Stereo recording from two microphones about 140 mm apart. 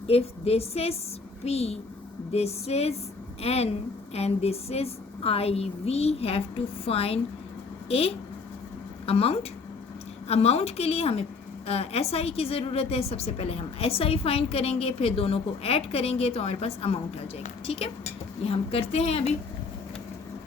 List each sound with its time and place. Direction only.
0.1 s a woman's voice: 45° left (ahead or behind)